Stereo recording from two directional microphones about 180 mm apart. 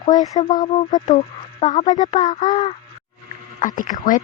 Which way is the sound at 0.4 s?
20° left (ahead or behind).